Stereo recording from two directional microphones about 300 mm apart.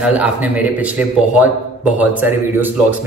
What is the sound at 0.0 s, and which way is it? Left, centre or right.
A man's voice, centre.